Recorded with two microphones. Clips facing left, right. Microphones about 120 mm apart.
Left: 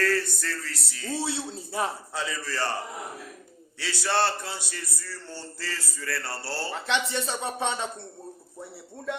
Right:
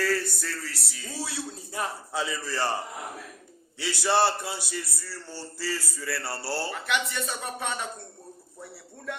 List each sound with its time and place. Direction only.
0.0 s a man's voice: 5° right (ahead or behind)
1.1 s speech: 25° left (ahead or behind)
2.1 s a man's voice: 10° right (ahead or behind)
3.8 s a man's voice: 15° right (ahead or behind)
6.8 s speech: 30° left (ahead or behind)